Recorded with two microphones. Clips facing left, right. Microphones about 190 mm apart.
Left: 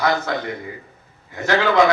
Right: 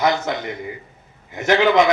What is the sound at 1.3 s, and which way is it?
Speech, 20° right (ahead or behind).